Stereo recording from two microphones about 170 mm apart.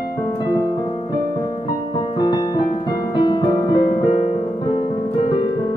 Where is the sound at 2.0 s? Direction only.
25° left (ahead or behind).